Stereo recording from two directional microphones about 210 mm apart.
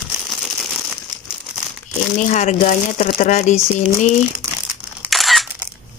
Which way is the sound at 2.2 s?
35° left (ahead or behind).